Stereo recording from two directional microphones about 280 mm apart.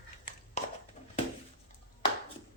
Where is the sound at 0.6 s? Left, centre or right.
Left.